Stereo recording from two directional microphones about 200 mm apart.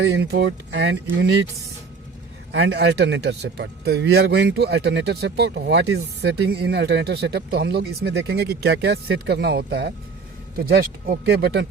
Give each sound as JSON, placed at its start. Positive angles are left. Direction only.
{"t": 0.0, "sound": "a man's voice", "side_deg": -55}
{"t": 2.5, "sound": "a man's voice", "side_deg": -60}